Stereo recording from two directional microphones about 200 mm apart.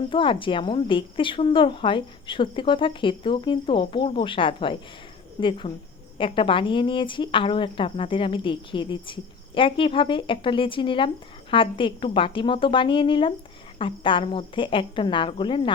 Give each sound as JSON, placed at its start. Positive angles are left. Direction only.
{"t": 0.1, "sound": "speech", "side_deg": 25}